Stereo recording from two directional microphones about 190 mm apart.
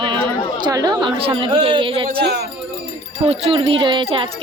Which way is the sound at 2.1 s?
60° right (ahead or behind).